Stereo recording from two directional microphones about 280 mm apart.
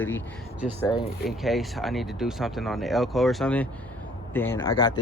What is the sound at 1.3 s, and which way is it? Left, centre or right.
Speech, centre.